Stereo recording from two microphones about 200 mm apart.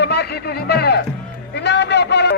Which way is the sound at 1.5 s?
60° left (ahead or behind).